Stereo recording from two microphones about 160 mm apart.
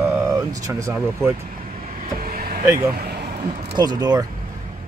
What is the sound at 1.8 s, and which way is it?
Vehicle, 50° right (ahead or behind).